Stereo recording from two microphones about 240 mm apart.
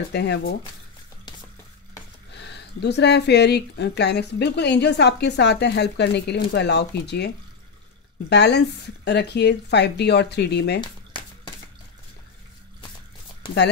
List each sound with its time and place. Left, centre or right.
0.1 s speech: left
2.3 s speech: left
8.3 s speech: left
10.8 s a sound: centre